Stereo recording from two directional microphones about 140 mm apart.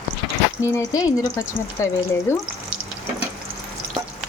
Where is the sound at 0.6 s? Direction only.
20° left (ahead or behind).